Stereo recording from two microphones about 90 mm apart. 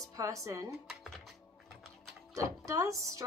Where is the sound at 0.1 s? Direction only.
40° right (ahead or behind).